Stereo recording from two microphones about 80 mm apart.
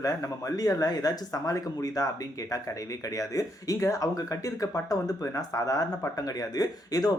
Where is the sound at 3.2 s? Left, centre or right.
Left.